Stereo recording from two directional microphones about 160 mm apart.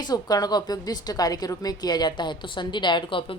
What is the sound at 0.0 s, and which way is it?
Speech, 25° left (ahead or behind).